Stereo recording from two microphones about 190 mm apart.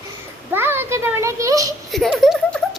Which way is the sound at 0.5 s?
10° right (ahead or behind).